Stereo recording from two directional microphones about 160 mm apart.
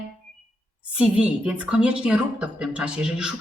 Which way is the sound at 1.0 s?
10° right (ahead or behind).